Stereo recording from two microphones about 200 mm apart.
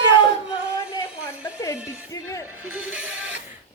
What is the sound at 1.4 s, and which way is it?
Music, 20° left (ahead or behind).